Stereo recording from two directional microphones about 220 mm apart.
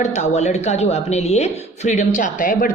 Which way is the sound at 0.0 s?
30° left (ahead or behind).